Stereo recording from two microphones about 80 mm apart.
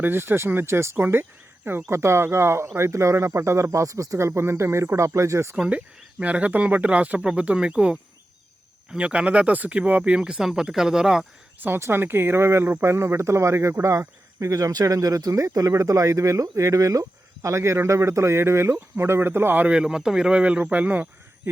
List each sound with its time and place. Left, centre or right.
0.0 s speech: right
5.5 s speech: centre
11.8 s speech: right
19.6 s speech: centre